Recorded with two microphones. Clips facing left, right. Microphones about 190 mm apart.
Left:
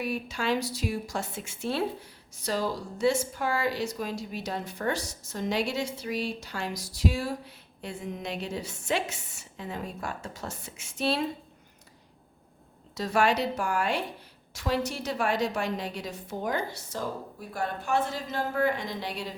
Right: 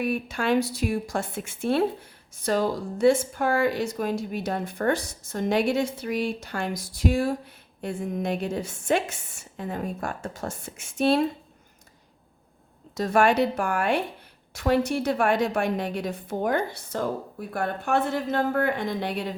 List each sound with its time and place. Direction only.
0.0 s a woman's voice: 55° right (ahead or behind)
12.9 s a woman's voice: 50° right (ahead or behind)